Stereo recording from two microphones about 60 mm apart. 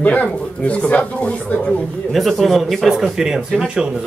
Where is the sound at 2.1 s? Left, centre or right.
Centre.